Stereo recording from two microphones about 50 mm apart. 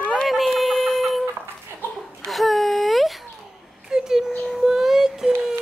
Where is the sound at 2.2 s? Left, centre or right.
Centre.